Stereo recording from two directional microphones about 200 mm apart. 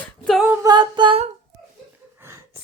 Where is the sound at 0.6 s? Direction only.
20° right (ahead or behind).